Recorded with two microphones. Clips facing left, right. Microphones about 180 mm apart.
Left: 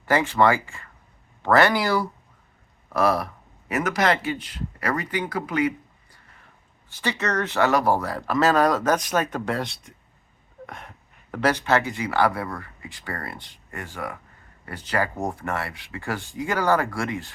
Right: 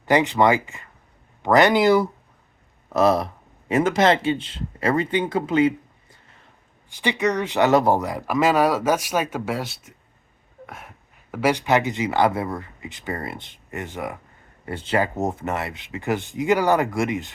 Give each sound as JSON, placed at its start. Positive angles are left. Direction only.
{"t": 0.0, "sound": "speech", "side_deg": -20}
{"t": 6.9, "sound": "speech", "side_deg": -15}